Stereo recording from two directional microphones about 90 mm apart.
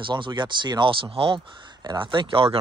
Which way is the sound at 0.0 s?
60° right (ahead or behind).